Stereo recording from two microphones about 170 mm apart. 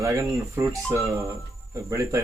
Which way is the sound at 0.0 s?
15° right (ahead or behind).